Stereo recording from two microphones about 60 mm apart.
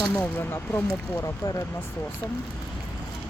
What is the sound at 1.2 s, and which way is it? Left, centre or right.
Speech, left.